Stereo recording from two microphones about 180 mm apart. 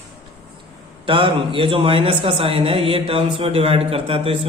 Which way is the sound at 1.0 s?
30° right (ahead or behind).